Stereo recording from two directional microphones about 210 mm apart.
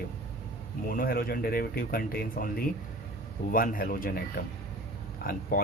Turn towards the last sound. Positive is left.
turn(degrees=45)  # may be behind; listen again after turning